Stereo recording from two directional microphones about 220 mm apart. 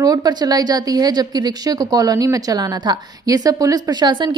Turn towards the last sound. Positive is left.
turn(degrees=-20)  # may be behind; listen again after turning